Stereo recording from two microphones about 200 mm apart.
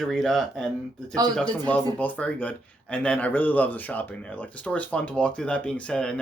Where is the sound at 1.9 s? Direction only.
10° left (ahead or behind).